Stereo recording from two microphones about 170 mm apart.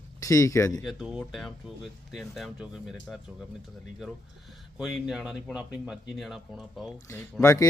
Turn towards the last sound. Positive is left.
turn(degrees=20)  # may be behind; listen again after turning